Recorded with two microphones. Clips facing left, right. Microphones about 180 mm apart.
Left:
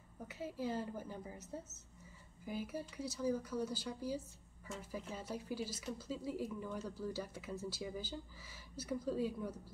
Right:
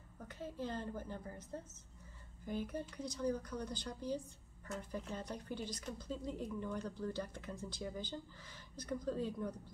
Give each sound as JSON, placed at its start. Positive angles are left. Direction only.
{"t": 0.3, "sound": "a woman's voice", "side_deg": 10}